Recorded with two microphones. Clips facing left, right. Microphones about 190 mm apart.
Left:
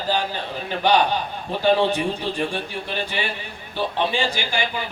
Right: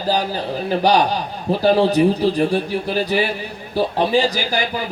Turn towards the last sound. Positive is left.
turn(degrees=-40)  # may be behind; listen again after turning